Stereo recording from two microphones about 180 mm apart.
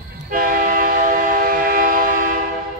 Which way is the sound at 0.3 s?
50° right (ahead or behind).